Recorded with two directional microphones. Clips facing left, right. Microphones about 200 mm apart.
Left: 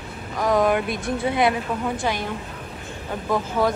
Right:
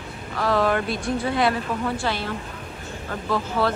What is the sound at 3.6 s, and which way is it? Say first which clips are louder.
Speech: left 2 dB; 15° left (ahead or behind).